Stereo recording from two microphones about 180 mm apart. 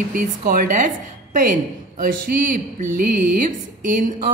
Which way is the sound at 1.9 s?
50° right (ahead or behind).